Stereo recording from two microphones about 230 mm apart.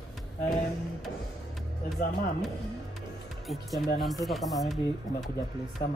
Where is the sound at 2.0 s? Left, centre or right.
Left.